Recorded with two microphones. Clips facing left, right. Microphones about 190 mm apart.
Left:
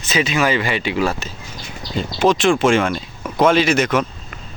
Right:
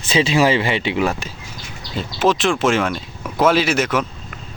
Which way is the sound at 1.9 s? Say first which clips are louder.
Left 1 dB; 5° right (ahead or behind).